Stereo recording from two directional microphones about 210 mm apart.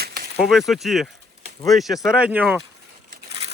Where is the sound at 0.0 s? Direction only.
45° right (ahead or behind).